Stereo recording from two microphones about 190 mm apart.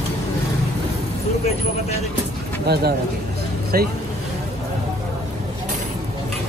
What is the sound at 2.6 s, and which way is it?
Speech, 60° right (ahead or behind).